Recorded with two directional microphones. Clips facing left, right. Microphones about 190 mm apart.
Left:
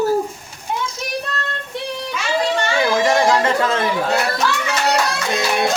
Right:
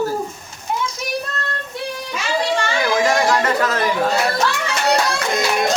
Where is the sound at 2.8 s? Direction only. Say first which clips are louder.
Left 2 dB; 25° left (ahead or behind).